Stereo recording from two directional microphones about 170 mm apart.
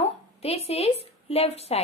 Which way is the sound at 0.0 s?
35° left (ahead or behind).